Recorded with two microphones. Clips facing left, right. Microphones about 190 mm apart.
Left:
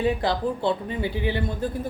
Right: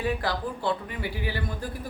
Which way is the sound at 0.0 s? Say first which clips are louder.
Left 5 dB; 25° left (ahead or behind).